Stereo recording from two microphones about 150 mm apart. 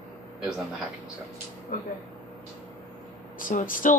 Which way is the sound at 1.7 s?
65° left (ahead or behind).